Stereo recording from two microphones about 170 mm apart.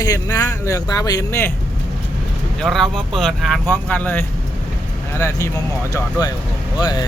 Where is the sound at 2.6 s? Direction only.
Centre (ahead or behind); by 7.1 s 25° left (ahead or behind).